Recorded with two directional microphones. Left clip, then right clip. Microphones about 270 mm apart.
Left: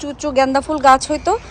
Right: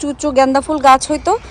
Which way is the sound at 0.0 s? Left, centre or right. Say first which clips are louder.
Right 3 dB; centre.